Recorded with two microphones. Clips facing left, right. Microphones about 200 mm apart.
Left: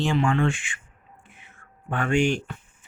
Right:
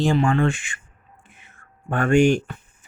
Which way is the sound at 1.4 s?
45° right (ahead or behind).